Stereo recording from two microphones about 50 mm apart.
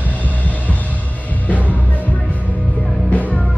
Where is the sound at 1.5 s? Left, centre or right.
Left.